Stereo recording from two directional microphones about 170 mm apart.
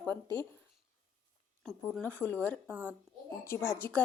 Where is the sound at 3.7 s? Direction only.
15° left (ahead or behind).